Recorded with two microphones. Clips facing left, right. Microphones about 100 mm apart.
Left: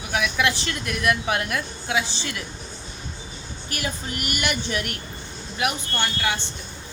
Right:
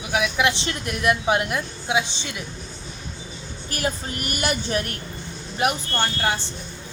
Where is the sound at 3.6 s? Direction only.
35° right (ahead or behind).